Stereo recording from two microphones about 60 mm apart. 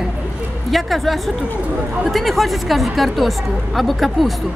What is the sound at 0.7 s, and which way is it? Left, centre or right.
Speech, centre.